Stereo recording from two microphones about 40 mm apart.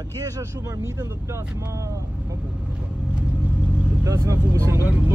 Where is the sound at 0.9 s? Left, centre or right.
Right.